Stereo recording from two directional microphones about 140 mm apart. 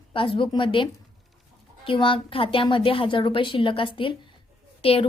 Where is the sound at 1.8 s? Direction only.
40° left (ahead or behind).